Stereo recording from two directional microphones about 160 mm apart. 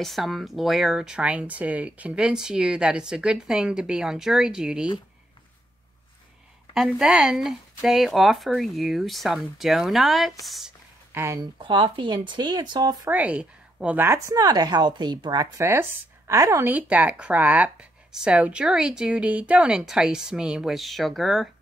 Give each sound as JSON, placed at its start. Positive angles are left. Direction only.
{"t": 0.0, "sound": "speech", "side_deg": 0}
{"t": 6.7, "sound": "speech", "side_deg": -5}
{"t": 11.1, "sound": "speech", "side_deg": -15}
{"t": 11.5, "sound": "speech", "side_deg": -30}
{"t": 13.1, "sound": "speech", "side_deg": -10}